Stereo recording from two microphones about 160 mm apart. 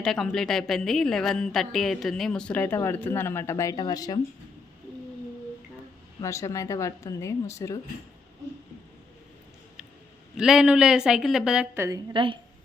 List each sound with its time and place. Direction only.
0.0 s a woman's voice: 5° left (ahead or behind); by 4.2 s 25° left (ahead or behind)
6.2 s speech: 20° left (ahead or behind)
10.3 s a woman's voice: 5° right (ahead or behind)
12.1 s speech: 30° right (ahead or behind)